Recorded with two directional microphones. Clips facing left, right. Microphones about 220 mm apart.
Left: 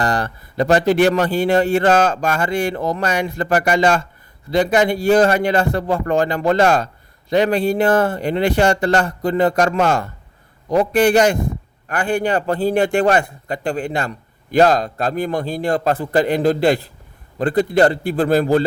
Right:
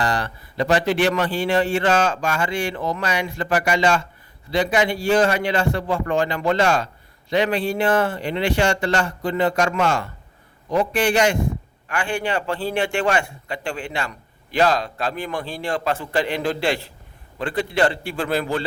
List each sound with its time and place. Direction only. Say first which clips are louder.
0.0 s a man's voice: left 3 dB; 45° left (ahead or behind)